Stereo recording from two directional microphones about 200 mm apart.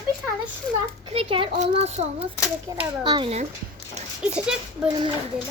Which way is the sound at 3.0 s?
25° right (ahead or behind).